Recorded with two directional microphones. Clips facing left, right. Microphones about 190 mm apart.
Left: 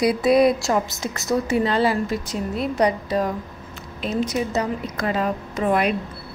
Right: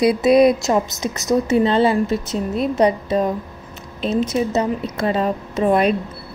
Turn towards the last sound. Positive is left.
turn(degrees=-25)  # may be behind; listen again after turning